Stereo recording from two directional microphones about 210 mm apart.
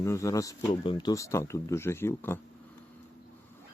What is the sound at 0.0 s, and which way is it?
Speech, 15° left (ahead or behind).